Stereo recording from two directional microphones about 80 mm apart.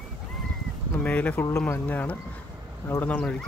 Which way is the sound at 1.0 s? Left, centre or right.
Centre.